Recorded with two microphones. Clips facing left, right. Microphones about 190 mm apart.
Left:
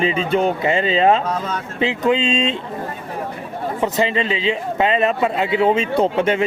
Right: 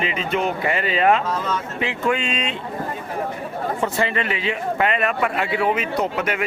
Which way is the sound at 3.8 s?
20° left (ahead or behind).